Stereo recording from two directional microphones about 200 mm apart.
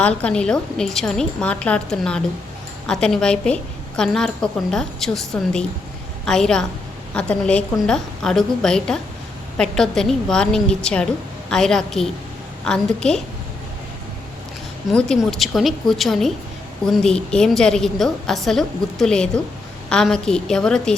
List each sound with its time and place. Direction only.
0.0 s a woman's voice: 5° left (ahead or behind)
14.8 s a woman's voice: 5° left (ahead or behind)